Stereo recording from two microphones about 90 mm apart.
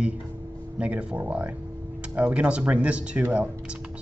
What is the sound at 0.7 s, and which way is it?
Speech, 15° right (ahead or behind).